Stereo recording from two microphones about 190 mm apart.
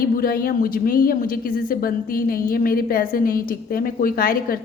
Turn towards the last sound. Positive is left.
turn(degrees=50)  # may be behind; listen again after turning